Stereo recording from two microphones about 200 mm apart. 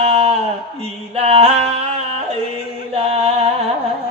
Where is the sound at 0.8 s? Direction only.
30° right (ahead or behind).